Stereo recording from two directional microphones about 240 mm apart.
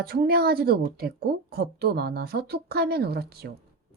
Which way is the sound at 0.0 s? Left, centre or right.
Right.